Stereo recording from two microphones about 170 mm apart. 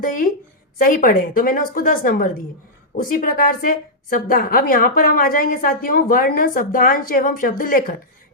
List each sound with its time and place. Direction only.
0.0 s a woman's voice: 55° left (ahead or behind)